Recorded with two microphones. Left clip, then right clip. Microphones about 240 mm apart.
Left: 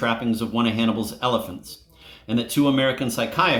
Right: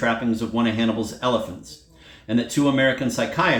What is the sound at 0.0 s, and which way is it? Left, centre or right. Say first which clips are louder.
Speech: right 1 dB; left.